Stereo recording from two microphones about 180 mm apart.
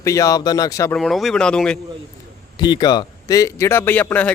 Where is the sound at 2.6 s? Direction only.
25° left (ahead or behind).